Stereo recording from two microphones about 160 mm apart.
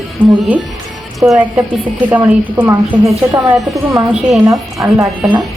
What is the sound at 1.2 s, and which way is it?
A woman's voice, centre (ahead or behind).